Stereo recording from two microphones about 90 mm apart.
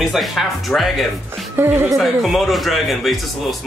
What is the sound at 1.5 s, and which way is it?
Music, 25° right (ahead or behind).